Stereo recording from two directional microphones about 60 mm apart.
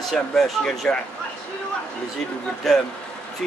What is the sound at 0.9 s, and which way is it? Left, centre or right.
Speech, left.